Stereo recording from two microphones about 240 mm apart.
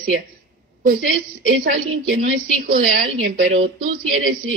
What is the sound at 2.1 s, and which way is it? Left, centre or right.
A man's voice, right.